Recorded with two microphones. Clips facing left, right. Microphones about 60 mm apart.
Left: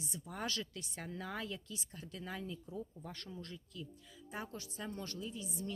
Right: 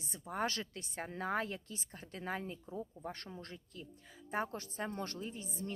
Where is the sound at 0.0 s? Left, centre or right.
Right.